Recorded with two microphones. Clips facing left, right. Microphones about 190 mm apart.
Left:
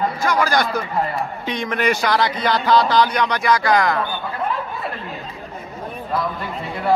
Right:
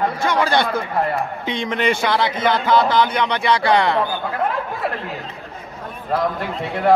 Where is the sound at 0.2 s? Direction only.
25° right (ahead or behind).